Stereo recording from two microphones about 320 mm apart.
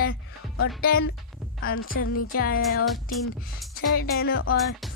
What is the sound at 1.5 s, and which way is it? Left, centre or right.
Speech, left.